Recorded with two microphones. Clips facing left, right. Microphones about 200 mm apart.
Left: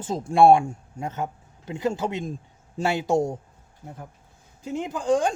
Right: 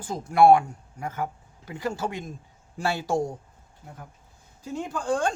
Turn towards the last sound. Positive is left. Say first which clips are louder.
# left 4 dB
turn(degrees=15)  # may be behind; listen again after turning